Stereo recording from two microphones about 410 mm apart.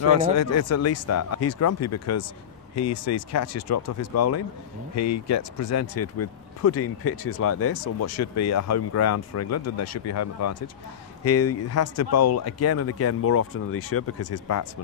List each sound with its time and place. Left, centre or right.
0.1 s speech: left